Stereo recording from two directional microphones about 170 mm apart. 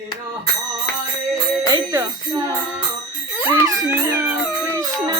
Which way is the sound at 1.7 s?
20° right (ahead or behind).